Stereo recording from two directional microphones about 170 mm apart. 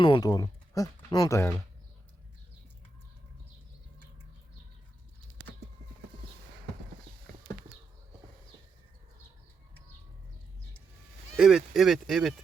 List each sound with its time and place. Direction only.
0.0 s speech: 25° left (ahead or behind)
11.3 s speech: 5° right (ahead or behind)